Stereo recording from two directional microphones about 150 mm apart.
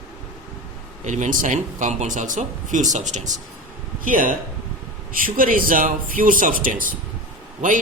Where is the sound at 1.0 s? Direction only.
55° right (ahead or behind).